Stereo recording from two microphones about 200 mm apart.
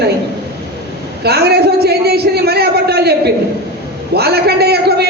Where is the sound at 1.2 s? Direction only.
55° right (ahead or behind).